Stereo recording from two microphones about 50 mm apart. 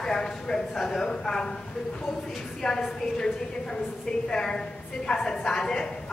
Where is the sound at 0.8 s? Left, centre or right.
Centre.